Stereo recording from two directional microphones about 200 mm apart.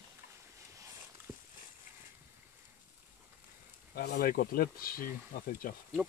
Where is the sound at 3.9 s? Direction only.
50° left (ahead or behind).